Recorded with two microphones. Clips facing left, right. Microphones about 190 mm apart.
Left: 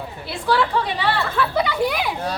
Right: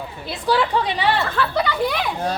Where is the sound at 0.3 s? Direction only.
15° right (ahead or behind).